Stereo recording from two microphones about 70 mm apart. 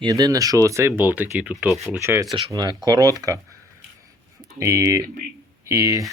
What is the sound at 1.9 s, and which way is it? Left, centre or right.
Speech, centre.